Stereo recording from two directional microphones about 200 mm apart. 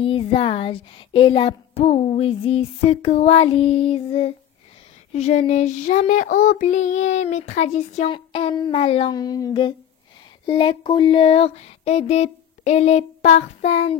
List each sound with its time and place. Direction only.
0.0 s speech: 25° left (ahead or behind)
5.1 s child singing: 35° left (ahead or behind)